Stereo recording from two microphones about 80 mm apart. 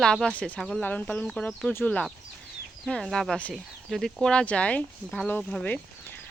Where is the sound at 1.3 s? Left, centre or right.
Centre.